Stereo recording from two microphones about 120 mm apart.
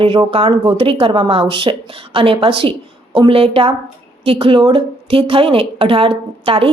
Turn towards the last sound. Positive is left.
turn(degrees=-50)  # may be behind; listen again after turning